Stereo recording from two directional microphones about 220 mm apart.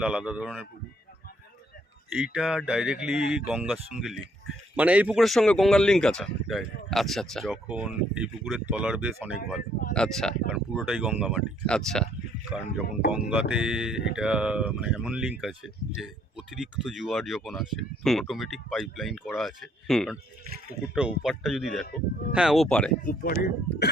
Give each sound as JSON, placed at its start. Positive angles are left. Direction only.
{"t": 0.0, "sound": "speech", "side_deg": -5}
{"t": 2.1, "sound": "speech", "side_deg": -5}
{"t": 23.0, "sound": "speech", "side_deg": 40}